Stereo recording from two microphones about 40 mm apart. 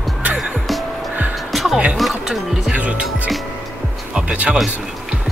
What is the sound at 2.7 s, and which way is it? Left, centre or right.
Music, right.